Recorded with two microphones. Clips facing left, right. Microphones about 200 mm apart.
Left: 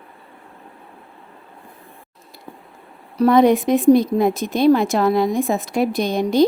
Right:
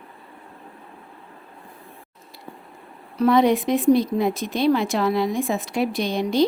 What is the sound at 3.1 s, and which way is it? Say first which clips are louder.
Speech: left 4 dB; 40° left (ahead or behind).